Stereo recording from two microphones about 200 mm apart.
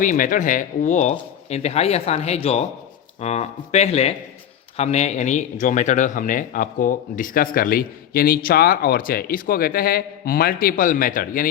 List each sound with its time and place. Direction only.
0.0 s a man's voice: 40° left (ahead or behind)